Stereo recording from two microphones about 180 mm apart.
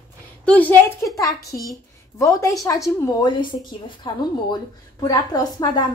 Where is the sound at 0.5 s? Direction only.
10° left (ahead or behind).